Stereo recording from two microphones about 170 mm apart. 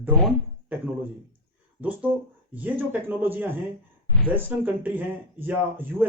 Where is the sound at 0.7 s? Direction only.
10° right (ahead or behind).